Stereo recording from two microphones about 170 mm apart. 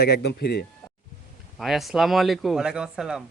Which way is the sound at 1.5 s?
Centre (ahead or behind).